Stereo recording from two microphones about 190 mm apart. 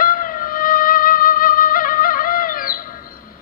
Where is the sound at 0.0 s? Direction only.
45° left (ahead or behind).